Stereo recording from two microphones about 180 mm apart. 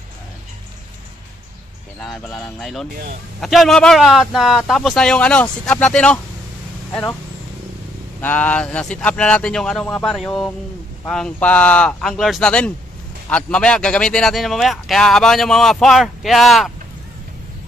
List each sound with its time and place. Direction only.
2.0 s speech: centre (ahead or behind)
8.2 s speech: 10° left (ahead or behind)